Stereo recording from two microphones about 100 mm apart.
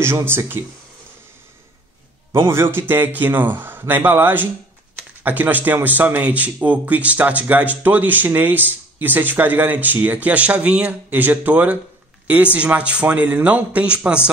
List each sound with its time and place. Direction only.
0.0 s a man's voice: 25° right (ahead or behind)
2.3 s a man's voice: 25° right (ahead or behind)